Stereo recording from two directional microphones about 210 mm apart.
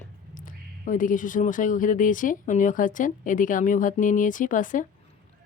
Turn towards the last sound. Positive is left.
turn(degrees=40)  # may be behind; listen again after turning